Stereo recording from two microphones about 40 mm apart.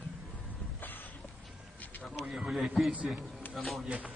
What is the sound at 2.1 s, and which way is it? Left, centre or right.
Speech, centre.